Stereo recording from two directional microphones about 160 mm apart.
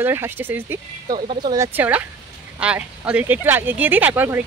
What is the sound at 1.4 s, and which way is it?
Speech, 25° right (ahead or behind).